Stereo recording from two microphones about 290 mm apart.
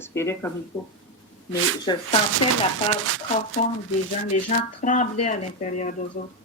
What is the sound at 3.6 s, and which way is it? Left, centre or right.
Speech, left.